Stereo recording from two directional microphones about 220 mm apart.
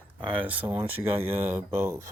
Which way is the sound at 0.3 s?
5° right (ahead or behind).